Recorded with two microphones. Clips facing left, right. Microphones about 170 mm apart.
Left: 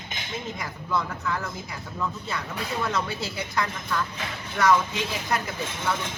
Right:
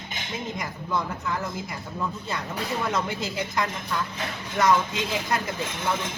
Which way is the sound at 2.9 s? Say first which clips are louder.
Right 1 dB; 15° right (ahead or behind).